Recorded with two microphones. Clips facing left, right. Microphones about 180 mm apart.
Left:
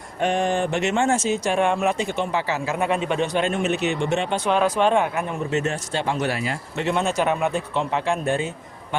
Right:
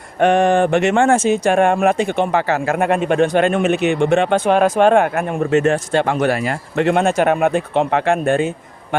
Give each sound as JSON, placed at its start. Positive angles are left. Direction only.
{"t": 0.2, "sound": "speech", "side_deg": -60}